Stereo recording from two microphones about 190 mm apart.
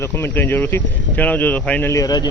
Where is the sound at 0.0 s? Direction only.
10° left (ahead or behind).